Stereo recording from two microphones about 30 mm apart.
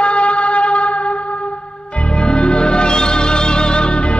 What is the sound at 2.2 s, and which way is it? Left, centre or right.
Music, left.